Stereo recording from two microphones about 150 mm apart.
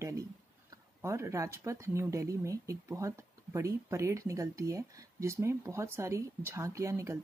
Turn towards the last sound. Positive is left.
turn(degrees=-20)  # may be behind; listen again after turning